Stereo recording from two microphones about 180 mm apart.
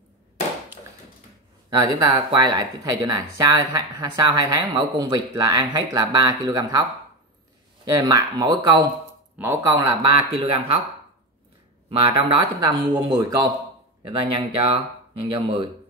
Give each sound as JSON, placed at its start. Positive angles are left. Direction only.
{"t": 1.7, "sound": "speech", "side_deg": -20}
{"t": 10.3, "sound": "speech", "side_deg": -30}
{"t": 11.9, "sound": "speech", "side_deg": -30}